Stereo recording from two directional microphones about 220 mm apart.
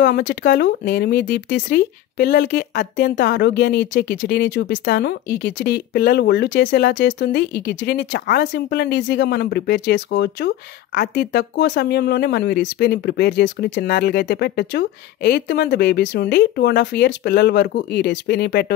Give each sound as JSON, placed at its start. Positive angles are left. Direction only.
{"t": 0.0, "sound": "speech", "side_deg": 50}